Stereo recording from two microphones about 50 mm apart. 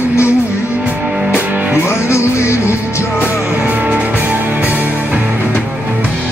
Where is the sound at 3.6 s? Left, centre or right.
Right.